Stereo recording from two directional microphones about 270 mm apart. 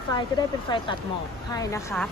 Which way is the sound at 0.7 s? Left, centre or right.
Centre.